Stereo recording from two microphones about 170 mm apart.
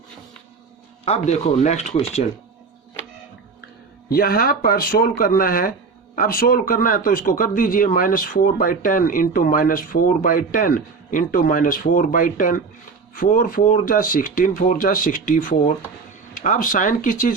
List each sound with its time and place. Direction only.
1.0 s speech: 40° left (ahead or behind)
4.1 s a man's voice: 60° left (ahead or behind)